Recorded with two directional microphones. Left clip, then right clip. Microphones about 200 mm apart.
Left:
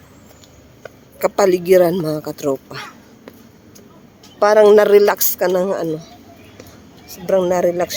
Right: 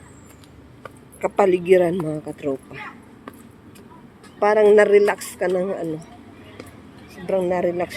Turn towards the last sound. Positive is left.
turn(degrees=20)  # may be behind; listen again after turning